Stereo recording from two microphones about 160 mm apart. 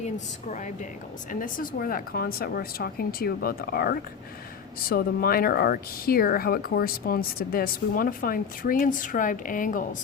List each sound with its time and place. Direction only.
0.0 s speech: 50° left (ahead or behind)